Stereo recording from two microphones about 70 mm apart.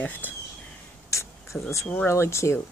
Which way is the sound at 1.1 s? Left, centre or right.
Left.